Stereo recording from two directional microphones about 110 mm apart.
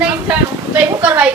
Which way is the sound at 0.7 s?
15° right (ahead or behind).